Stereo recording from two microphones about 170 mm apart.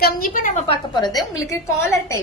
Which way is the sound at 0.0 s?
55° left (ahead or behind).